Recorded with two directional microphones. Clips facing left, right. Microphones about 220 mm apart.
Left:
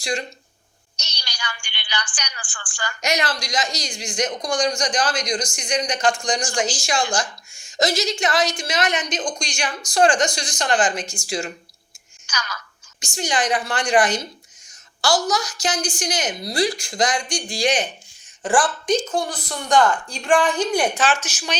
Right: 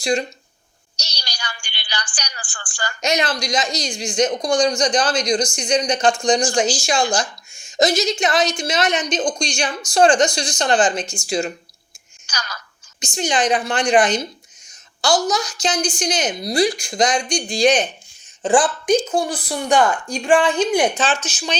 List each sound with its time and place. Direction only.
0.9 s a sound: 35° right (ahead or behind)
3.1 s a woman's voice: 20° right (ahead or behind)
9.1 s a woman's voice: 35° right (ahead or behind)
9.9 s a woman's voice: 25° right (ahead or behind)
12.2 s speech: 35° right (ahead or behind)
13.0 s a woman's voice: 20° right (ahead or behind)